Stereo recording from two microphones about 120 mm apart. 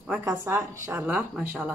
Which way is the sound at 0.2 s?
15° right (ahead or behind).